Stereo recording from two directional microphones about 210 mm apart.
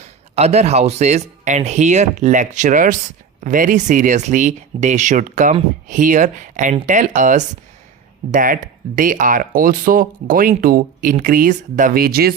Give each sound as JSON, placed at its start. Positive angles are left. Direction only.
{"t": 0.0, "sound": "speech", "side_deg": -30}